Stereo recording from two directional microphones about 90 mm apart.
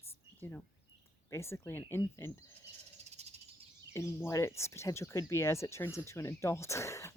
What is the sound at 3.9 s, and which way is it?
Speech, 30° left (ahead or behind).